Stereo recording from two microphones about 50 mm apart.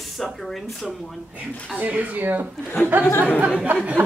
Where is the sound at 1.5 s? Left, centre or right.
Left.